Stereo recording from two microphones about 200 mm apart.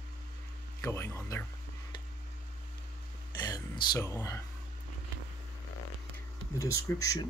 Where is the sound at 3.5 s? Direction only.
20° left (ahead or behind).